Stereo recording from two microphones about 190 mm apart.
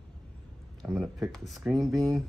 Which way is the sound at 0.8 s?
5° right (ahead or behind).